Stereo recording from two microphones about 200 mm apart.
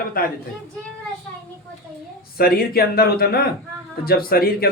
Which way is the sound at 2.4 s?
50° left (ahead or behind).